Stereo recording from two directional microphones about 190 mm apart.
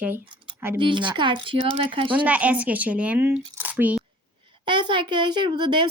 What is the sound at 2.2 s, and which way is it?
Speech, 5° right (ahead or behind).